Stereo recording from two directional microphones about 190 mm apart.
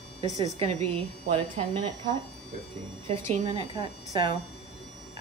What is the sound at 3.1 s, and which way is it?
Speech, 30° right (ahead or behind).